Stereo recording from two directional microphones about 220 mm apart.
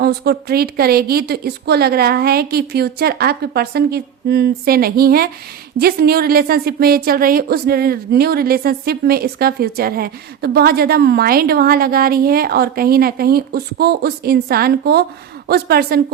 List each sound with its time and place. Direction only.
0.0 s a woman's voice: 45° right (ahead or behind)